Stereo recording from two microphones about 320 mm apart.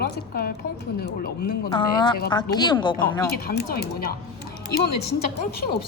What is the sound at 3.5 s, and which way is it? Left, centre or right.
Speech, left.